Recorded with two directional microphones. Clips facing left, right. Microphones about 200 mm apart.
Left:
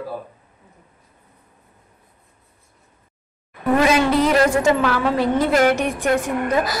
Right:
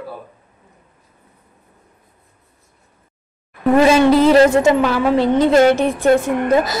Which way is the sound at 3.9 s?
30° right (ahead or behind).